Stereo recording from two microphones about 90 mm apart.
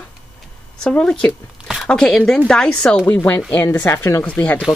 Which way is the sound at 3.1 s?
25° left (ahead or behind).